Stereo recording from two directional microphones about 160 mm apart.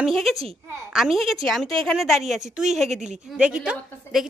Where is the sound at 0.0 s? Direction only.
Centre (ahead or behind).